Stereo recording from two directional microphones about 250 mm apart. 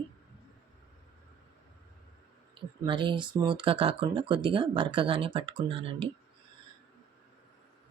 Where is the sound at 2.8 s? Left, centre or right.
Centre.